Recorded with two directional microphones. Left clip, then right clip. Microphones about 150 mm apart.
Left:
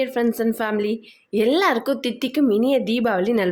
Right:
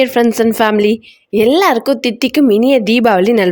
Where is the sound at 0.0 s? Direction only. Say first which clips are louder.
Right 10 dB; 55° right (ahead or behind).